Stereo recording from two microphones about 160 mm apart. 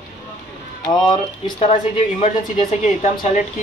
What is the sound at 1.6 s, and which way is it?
A woman's voice, 40° left (ahead or behind).